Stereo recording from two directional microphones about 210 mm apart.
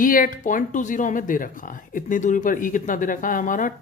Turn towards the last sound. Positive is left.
turn(degrees=40)  # may be behind; listen again after turning